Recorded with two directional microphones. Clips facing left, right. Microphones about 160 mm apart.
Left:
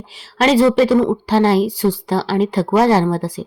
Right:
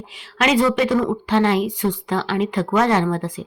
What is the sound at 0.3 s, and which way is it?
A woman's voice, 35° left (ahead or behind).